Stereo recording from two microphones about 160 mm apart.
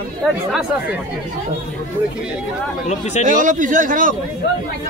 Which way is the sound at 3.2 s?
55° right (ahead or behind).